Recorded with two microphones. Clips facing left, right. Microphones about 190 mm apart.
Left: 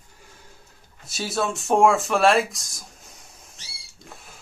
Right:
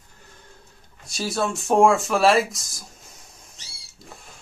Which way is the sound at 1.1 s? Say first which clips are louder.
Right 1 dB; centre (ahead or behind).